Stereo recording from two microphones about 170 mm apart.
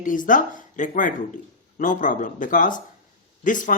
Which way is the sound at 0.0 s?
50° left (ahead or behind).